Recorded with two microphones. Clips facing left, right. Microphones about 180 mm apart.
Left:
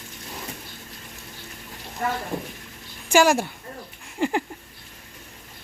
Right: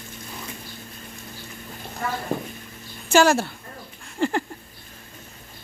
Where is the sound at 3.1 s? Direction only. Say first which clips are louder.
Right 1 dB; 10° left (ahead or behind).